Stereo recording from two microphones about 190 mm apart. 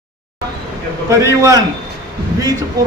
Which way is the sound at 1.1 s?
15° right (ahead or behind).